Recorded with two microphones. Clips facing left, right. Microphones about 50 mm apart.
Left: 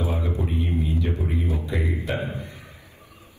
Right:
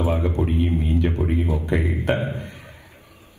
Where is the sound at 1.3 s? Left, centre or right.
Right.